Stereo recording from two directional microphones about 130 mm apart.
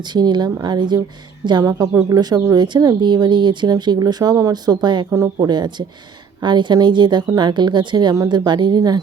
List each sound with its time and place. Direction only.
0.1 s a woman's voice: 35° right (ahead or behind)